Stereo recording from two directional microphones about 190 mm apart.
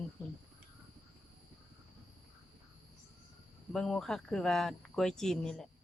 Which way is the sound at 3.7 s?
5° left (ahead or behind).